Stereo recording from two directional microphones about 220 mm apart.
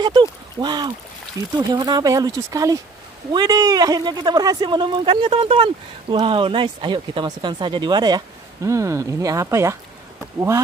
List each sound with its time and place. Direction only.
0.0 s speech: 20° right (ahead or behind)